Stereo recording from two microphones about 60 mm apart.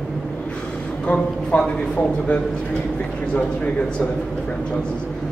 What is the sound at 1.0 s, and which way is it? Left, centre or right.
Speech, left.